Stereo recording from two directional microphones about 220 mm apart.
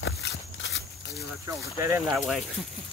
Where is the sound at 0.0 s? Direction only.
55° left (ahead or behind).